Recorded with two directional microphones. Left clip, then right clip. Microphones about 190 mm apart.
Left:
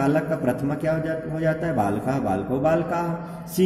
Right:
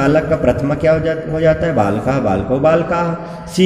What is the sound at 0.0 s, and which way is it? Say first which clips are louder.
A man's voice: right 9 dB; 10° left (ahead or behind).